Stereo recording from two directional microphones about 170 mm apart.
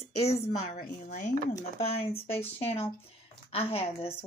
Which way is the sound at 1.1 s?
45° left (ahead or behind).